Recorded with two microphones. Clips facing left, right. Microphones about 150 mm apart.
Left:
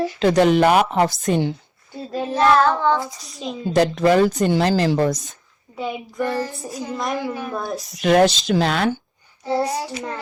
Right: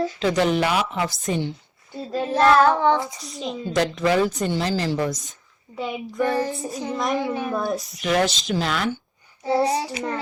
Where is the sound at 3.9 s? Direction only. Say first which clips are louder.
Left 4 dB; 45° left (ahead or behind).